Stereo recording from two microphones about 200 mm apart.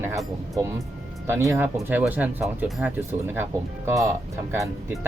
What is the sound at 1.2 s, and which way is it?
Speech, 15° right (ahead or behind).